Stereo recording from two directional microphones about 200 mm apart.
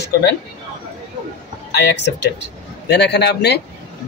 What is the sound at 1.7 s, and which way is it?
A man's voice, 55° left (ahead or behind).